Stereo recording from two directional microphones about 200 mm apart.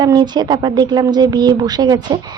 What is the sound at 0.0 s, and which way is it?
Speech, 20° right (ahead or behind).